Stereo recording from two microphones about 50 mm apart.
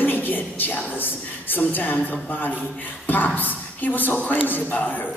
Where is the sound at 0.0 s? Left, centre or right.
Left.